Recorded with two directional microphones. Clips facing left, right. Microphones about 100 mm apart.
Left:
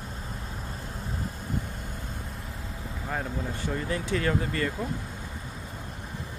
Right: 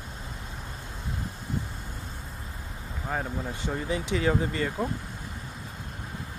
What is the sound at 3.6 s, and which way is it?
Speech, 15° right (ahead or behind).